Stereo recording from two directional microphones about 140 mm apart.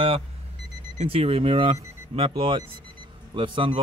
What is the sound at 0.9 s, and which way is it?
Speech, 45° right (ahead or behind).